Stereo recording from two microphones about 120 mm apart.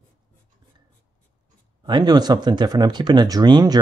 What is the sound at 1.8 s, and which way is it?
Speech, 40° right (ahead or behind).